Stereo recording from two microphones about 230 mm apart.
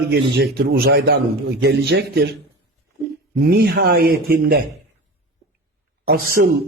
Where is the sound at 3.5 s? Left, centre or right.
Right.